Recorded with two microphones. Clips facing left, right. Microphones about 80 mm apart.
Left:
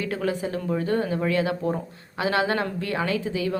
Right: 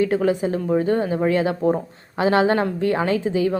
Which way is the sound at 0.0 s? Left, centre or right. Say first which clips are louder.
Right 7 dB; right.